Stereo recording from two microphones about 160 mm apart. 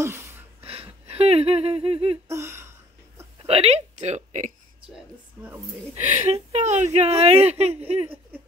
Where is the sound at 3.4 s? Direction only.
40° right (ahead or behind).